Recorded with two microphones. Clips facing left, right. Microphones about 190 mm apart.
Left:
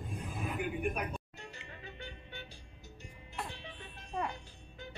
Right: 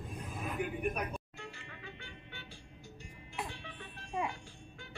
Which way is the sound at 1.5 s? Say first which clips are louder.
Even; 40° left (ahead or behind).